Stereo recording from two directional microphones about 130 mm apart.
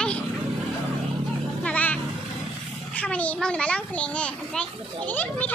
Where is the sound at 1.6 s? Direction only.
10° left (ahead or behind).